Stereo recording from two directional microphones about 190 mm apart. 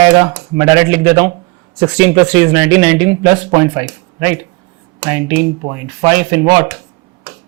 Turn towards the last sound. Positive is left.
turn(degrees=-15)  # may be behind; listen again after turning